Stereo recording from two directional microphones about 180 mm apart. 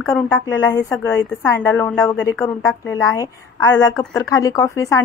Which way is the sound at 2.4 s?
20° left (ahead or behind).